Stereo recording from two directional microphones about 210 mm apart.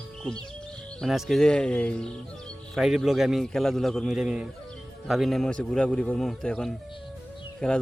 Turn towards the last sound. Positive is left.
turn(degrees=5)  # may be behind; listen again after turning